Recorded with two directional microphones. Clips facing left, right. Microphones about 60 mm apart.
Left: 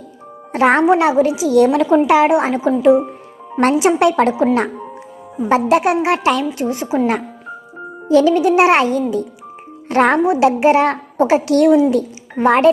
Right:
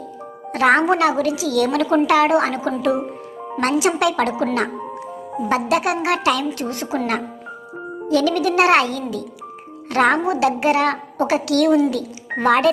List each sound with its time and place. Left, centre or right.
0.5 s a woman's voice: left
5.5 s a woman's voice: left
8.0 s a woman's voice: left